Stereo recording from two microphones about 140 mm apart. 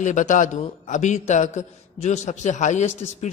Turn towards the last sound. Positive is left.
turn(degrees=55)  # may be behind; listen again after turning